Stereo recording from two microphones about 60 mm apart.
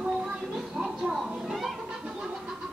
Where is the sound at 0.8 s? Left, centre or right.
Centre.